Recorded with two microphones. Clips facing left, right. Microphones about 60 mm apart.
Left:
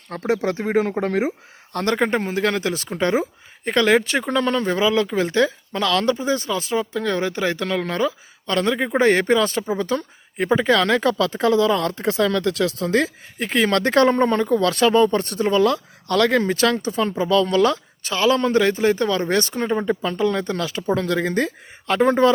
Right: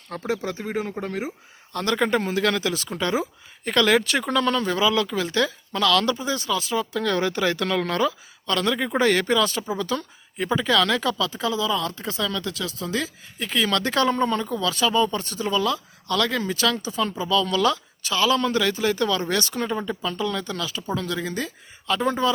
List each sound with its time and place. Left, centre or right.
0.3 s speech: left
1.0 s speech: left
1.7 s speech: left
2.0 s speech: left
3.7 s speech: left
6.9 s speech: centre
8.4 s speech: left
14.5 s speech: left